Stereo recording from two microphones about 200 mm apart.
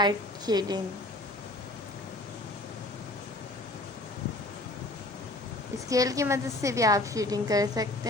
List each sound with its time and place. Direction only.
0.0 s a woman's voice: 20° right (ahead or behind)
5.9 s a woman's voice: 15° right (ahead or behind)